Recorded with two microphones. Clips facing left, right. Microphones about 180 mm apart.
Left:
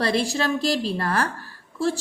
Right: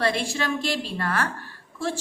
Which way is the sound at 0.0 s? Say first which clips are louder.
Left 3 dB; 35° left (ahead or behind).